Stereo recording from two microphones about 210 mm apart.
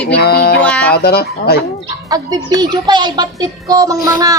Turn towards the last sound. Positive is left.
turn(degrees=-15)  # may be behind; listen again after turning